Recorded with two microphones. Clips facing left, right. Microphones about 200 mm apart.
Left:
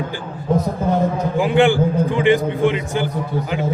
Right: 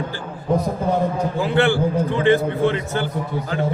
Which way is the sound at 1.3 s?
15° left (ahead or behind).